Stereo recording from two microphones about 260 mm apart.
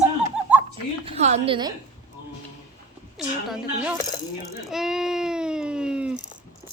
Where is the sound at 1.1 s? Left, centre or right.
Right.